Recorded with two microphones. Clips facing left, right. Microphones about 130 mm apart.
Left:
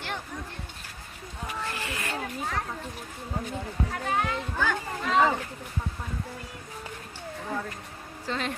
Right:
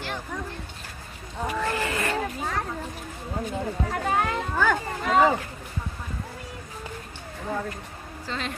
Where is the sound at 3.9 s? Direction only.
65° right (ahead or behind).